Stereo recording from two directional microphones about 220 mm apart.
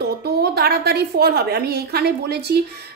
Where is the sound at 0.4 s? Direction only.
45° right (ahead or behind).